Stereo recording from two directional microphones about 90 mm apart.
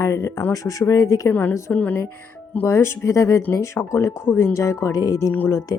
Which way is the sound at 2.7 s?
30° left (ahead or behind).